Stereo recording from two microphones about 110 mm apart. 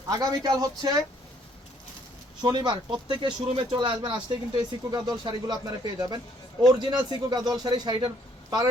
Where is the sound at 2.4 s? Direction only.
40° right (ahead or behind).